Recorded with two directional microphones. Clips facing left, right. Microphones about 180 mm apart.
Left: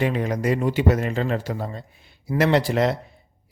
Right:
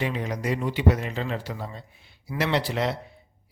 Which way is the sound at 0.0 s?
50° left (ahead or behind).